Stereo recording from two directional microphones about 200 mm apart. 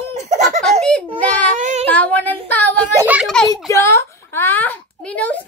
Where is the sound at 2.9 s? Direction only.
10° right (ahead or behind).